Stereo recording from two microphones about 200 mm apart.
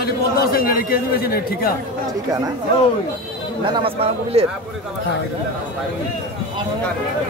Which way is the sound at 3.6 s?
25° right (ahead or behind).